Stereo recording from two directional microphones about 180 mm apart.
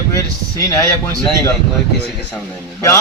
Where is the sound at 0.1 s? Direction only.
20° left (ahead or behind).